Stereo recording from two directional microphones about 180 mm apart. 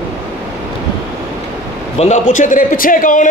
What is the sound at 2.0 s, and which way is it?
A man's voice, 40° left (ahead or behind).